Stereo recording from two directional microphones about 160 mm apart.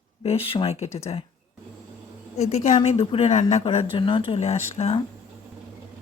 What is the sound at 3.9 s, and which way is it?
Speech, 30° left (ahead or behind).